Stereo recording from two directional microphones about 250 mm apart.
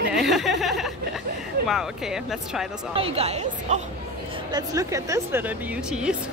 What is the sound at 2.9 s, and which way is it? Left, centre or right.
Speech, right.